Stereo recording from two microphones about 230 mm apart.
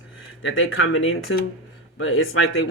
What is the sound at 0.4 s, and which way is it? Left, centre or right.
Speech, left.